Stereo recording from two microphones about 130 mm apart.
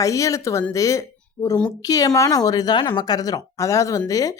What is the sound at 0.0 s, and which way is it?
A woman's voice, 25° left (ahead or behind).